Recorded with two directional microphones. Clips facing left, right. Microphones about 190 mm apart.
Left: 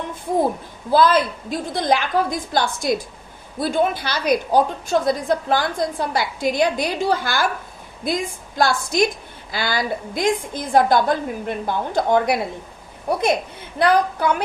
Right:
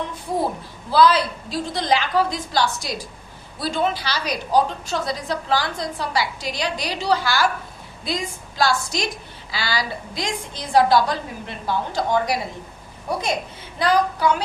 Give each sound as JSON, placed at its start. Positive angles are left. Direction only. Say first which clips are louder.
{"t": 0.9, "sound": "a woman's voice", "louder": "left 1 dB", "side_deg": 50}